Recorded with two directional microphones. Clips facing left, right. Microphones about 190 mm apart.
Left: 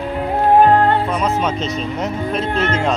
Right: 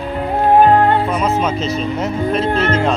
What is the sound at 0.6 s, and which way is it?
Music, 10° right (ahead or behind).